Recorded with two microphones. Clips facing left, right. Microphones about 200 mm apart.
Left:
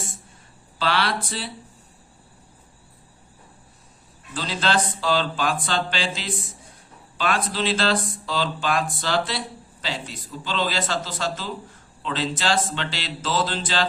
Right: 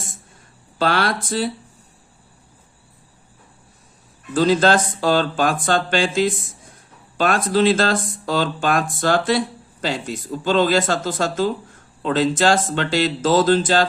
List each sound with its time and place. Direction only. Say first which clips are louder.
0.8 s speech: right 4 dB; 45° right (ahead or behind)
4.4 s speech: right 9 dB; 45° right (ahead or behind)